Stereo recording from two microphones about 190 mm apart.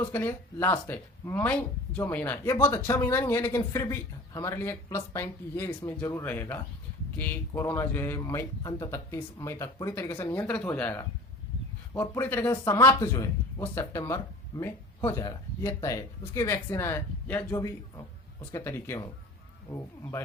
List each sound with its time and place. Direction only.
0.0 s speech: 10° left (ahead or behind)